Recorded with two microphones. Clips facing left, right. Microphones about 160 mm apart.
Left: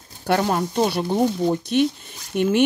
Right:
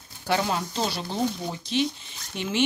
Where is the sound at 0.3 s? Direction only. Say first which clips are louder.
Left 5 dB; 50° left (ahead or behind).